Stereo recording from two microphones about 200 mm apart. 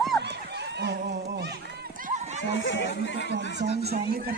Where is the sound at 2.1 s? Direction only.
35° right (ahead or behind).